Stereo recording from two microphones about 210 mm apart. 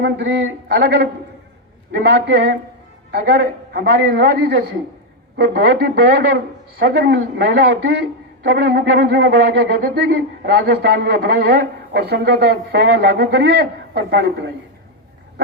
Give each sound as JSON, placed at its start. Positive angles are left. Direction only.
{"t": 0.0, "sound": "a man's voice", "side_deg": -55}